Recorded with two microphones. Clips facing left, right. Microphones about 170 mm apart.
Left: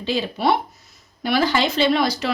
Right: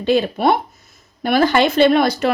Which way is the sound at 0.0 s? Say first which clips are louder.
Right 6 dB; 55° right (ahead or behind).